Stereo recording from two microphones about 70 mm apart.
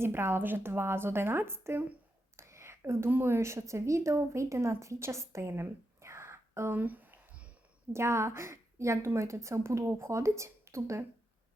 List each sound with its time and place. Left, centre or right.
0.0 s speech: right
2.3 s whispering: right
3.1 s a woman's voice: right
6.7 s a sound: right
7.9 s a woman's voice: right